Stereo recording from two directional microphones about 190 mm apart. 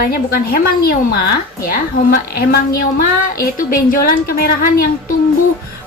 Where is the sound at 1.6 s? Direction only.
50° left (ahead or behind).